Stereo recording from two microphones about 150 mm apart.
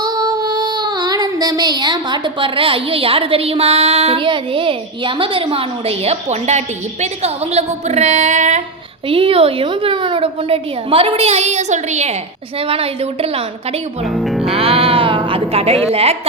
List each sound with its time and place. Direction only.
0.0 s child singing: 25° right (ahead or behind); by 8.6 s 55° right (ahead or behind)
9.0 s child singing: 40° right (ahead or behind)
14.0 s speech: centre (ahead or behind)
14.4 s a sound: 40° right (ahead or behind)